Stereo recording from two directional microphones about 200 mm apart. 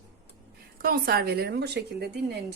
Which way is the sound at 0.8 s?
50° right (ahead or behind).